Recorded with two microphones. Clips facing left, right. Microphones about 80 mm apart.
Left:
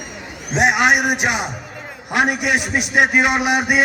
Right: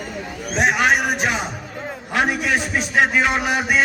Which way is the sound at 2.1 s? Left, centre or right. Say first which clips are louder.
Left 2 dB; centre.